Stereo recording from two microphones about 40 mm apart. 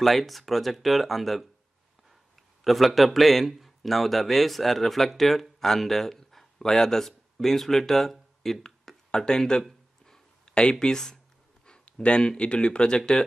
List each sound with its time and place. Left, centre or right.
0.0 s speech: centre
2.6 s a man's voice: centre
8.6 s a sound: centre
9.2 s speech: centre
11.6 s speech: left